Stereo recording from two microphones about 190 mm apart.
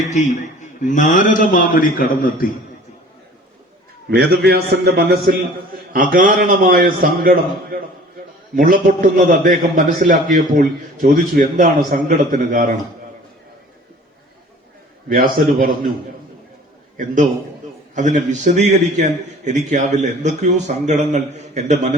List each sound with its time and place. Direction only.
0.1 s a man's voice: 40° left (ahead or behind)
4.1 s a man's voice: 60° right (ahead or behind)
15.1 s a man's voice: 50° right (ahead or behind)
17.9 s a man's voice: 40° right (ahead or behind)